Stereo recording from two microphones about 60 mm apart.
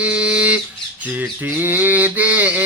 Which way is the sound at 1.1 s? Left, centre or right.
Right.